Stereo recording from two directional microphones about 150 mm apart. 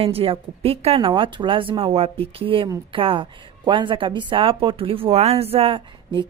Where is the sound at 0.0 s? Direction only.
40° right (ahead or behind).